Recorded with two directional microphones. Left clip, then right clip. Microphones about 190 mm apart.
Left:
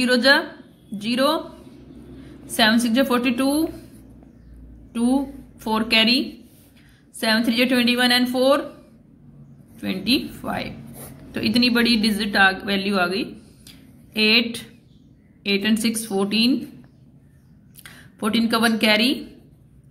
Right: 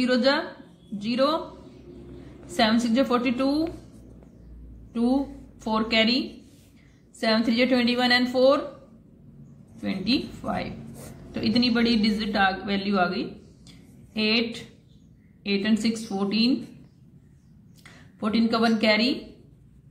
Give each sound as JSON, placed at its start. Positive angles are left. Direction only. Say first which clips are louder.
{"t": 0.0, "sound": "a woman's voice", "louder": "left 6 dB", "side_deg": 30}
{"t": 2.5, "sound": "a woman's voice", "louder": "left 4 dB", "side_deg": 25}
{"t": 4.9, "sound": "a woman's voice", "louder": "left 3 dB", "side_deg": 25}
{"t": 9.8, "sound": "a woman's voice", "louder": "left 4 dB", "side_deg": 25}
{"t": 17.8, "sound": "speech", "louder": "left 4 dB", "side_deg": 25}